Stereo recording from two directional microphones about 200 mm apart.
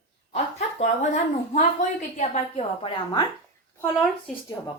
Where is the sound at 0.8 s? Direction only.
35° left (ahead or behind).